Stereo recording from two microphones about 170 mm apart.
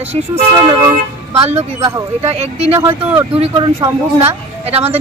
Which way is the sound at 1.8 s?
20° right (ahead or behind).